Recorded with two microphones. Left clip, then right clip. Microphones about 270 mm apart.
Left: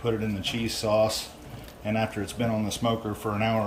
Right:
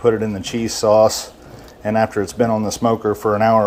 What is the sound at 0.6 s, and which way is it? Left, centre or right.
Speech, centre.